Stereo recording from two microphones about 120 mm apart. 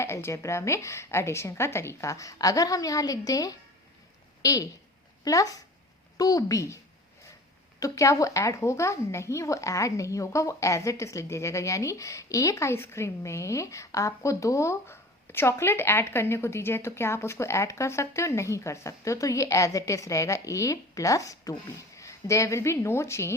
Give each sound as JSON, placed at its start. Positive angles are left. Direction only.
{"t": 0.0, "sound": "a woman's voice", "side_deg": 20}
{"t": 7.8, "sound": "a woman's voice", "side_deg": 25}